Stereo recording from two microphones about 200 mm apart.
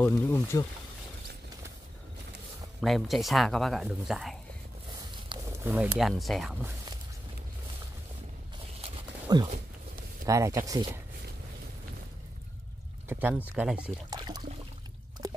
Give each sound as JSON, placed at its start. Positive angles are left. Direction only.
{"t": 0.0, "sound": "speech", "side_deg": 10}
{"t": 2.8, "sound": "speech", "side_deg": 0}
{"t": 5.3, "sound": "speech", "side_deg": -15}
{"t": 8.8, "sound": "a sound", "side_deg": -20}
{"t": 10.2, "sound": "speech", "side_deg": -15}
{"t": 13.1, "sound": "speech", "side_deg": -10}
{"t": 14.1, "sound": "pour", "side_deg": -20}